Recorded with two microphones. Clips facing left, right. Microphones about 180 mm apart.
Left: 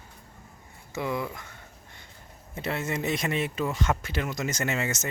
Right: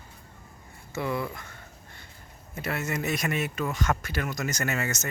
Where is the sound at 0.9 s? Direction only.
15° left (ahead or behind).